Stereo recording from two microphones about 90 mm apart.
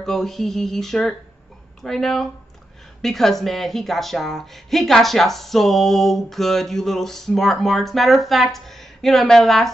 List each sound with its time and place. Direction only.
0.0 s speech: 5° left (ahead or behind)